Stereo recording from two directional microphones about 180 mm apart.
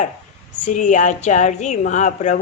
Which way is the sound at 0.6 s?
45° left (ahead or behind).